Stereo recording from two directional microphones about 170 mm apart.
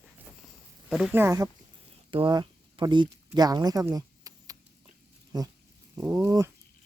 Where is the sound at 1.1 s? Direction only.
15° right (ahead or behind).